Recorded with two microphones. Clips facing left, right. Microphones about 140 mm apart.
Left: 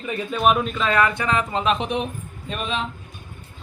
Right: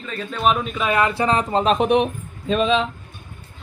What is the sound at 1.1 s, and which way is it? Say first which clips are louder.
Speech: right 4 dB; 35° right (ahead or behind).